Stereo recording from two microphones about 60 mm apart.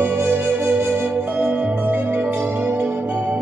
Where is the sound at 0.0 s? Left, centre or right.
Right.